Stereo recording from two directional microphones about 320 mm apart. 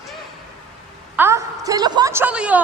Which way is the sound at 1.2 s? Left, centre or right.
Centre.